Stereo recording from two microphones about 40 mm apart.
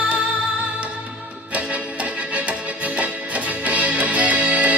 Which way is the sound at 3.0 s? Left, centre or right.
Right.